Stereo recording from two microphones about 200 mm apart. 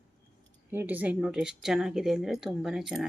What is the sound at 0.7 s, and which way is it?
Speech, 10° right (ahead or behind).